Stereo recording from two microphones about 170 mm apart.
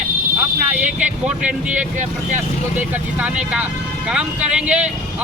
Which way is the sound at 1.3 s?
10° right (ahead or behind).